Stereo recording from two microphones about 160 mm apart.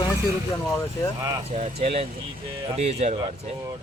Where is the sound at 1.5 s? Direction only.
45° right (ahead or behind).